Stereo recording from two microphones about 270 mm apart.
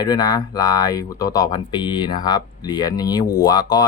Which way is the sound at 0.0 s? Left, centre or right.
Centre.